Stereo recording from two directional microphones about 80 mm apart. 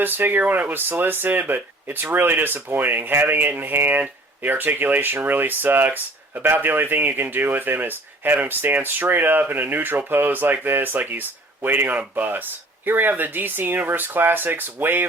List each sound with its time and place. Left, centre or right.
0.0 s speech: right